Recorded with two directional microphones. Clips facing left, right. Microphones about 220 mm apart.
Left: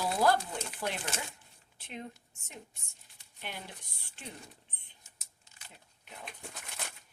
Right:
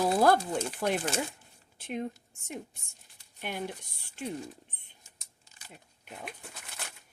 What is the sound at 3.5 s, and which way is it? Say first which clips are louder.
Speech: right 8 dB; 50° right (ahead or behind).